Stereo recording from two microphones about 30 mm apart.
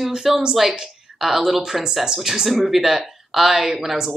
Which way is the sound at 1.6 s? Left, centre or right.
Right.